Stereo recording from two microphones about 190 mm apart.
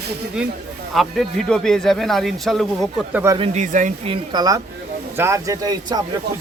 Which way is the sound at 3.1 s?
15° right (ahead or behind).